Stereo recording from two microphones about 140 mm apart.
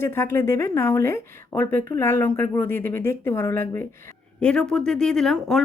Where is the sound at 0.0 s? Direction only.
15° left (ahead or behind).